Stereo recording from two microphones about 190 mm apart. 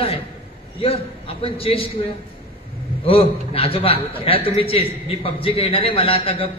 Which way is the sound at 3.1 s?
30° left (ahead or behind).